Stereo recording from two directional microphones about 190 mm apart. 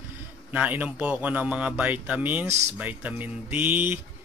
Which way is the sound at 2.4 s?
35° right (ahead or behind).